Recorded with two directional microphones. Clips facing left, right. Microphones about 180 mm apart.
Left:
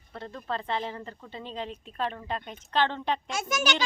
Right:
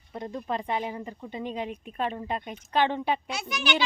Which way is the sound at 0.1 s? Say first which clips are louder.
Right 3 dB; 15° right (ahead or behind).